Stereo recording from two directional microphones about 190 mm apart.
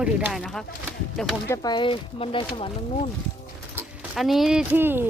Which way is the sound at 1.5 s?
20° left (ahead or behind).